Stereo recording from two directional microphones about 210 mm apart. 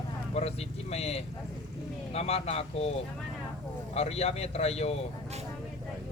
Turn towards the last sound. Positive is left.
turn(degrees=30)  # may be behind; listen again after turning